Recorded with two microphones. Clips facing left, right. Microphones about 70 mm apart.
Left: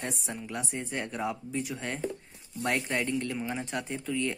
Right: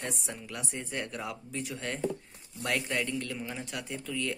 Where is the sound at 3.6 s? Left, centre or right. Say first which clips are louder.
Left 4 dB; left.